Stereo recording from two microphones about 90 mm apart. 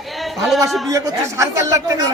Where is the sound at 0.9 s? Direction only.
35° right (ahead or behind).